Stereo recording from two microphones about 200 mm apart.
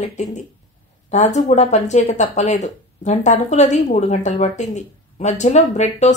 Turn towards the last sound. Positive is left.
turn(degrees=35)  # may be behind; listen again after turning